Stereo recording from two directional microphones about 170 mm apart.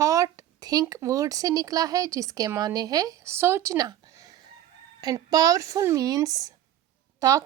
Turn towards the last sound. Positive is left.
turn(degrees=-20)  # may be behind; listen again after turning